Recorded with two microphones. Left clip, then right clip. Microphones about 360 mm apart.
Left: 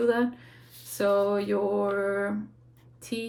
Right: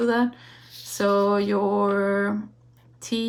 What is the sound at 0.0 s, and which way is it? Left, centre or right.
Speech, centre.